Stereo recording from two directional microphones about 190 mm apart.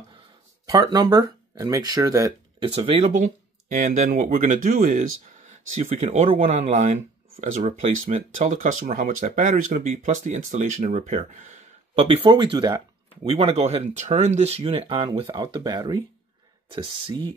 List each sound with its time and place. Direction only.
0.7 s speech: 20° right (ahead or behind)
3.7 s speech: 40° right (ahead or behind)